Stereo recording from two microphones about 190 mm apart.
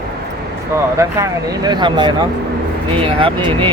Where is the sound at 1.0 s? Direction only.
20° right (ahead or behind).